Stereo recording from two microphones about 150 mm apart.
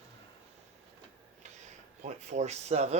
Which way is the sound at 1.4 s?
50° right (ahead or behind).